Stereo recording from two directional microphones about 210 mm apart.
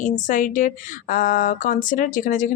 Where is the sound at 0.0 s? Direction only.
40° left (ahead or behind).